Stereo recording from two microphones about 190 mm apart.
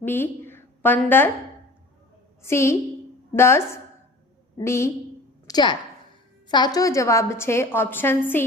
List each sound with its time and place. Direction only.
0.0 s a woman's voice: 10° left (ahead or behind)
2.4 s a woman's voice: 15° left (ahead or behind)